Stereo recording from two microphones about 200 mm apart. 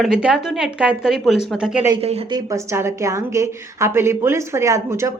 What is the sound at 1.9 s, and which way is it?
Speech, 30° right (ahead or behind).